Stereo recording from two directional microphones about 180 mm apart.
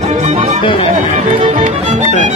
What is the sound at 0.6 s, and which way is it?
Music, 30° left (ahead or behind).